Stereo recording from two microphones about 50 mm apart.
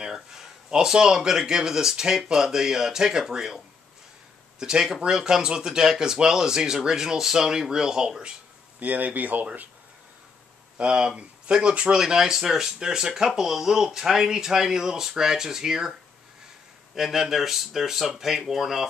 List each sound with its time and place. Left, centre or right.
0.0 s speech: centre
8.7 s speech: right
10.8 s speech: centre
16.9 s speech: centre